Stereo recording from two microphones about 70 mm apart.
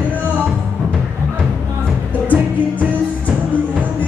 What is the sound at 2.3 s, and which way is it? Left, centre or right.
Music, right.